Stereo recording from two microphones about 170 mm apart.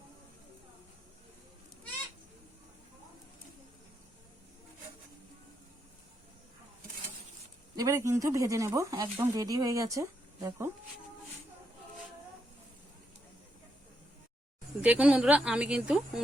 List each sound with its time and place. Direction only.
7.8 s speech: 20° right (ahead or behind)
14.8 s speech: 5° right (ahead or behind)